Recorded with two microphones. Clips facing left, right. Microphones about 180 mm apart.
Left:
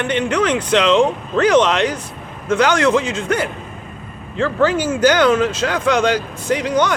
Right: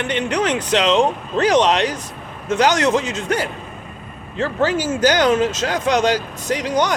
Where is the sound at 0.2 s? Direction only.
20° right (ahead or behind).